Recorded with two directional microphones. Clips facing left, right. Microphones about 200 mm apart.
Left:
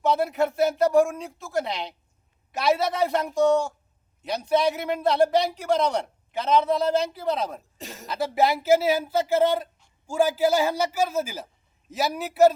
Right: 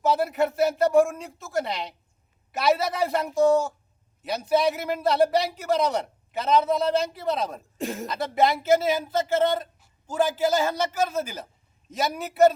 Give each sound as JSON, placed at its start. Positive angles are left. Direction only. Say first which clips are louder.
{"t": 0.0, "sound": "a man's voice", "louder": "even", "side_deg": 0}
{"t": 7.8, "sound": "speech", "louder": "right 10 dB", "side_deg": -55}
{"t": 8.0, "sound": "a man's voice", "louder": "left 1 dB", "side_deg": 5}